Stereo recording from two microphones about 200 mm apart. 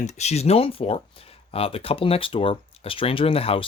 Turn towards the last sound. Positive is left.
turn(degrees=30)  # may be behind; listen again after turning